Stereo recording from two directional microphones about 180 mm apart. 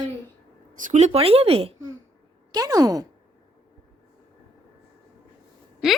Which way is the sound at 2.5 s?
20° right (ahead or behind).